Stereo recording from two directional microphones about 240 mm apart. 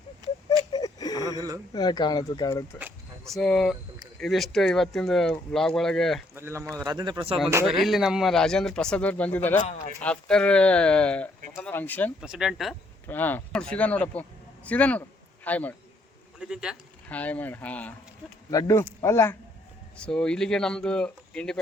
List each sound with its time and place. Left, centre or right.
0.2 s a sound: centre
0.7 s a sound: centre
1.4 s a man's voice: centre
1.7 s speech: centre
2.7 s speech: centre
6.3 s a man's voice: centre
7.5 s speech: centre
9.6 s speech: left
10.0 s speech: centre